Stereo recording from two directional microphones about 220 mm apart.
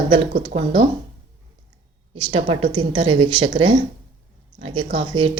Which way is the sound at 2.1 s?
20° right (ahead or behind).